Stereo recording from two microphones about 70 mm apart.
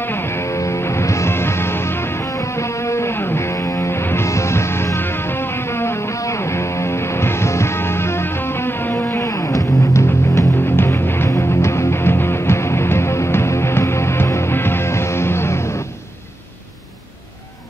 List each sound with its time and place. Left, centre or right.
0.0 s music: left
9.3 s music: left